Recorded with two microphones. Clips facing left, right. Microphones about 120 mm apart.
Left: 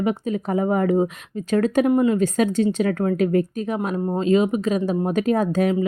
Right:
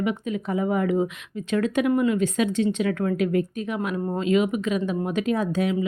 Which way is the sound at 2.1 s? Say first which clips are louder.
Left 3 dB; 40° left (ahead or behind).